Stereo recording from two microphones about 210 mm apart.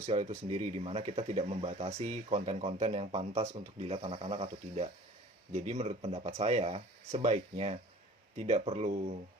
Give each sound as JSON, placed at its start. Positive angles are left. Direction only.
{"t": 0.0, "sound": "speech", "side_deg": -35}